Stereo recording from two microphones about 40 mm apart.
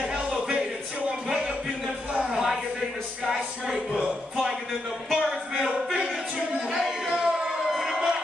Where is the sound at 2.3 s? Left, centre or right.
Centre.